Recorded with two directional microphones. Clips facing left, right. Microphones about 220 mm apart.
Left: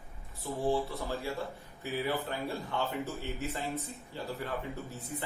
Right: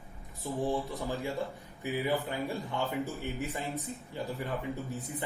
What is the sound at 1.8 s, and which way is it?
A man's voice, 15° right (ahead or behind).